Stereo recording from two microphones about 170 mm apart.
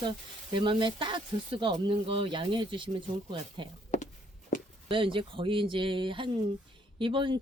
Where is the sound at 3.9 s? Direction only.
45° left (ahead or behind).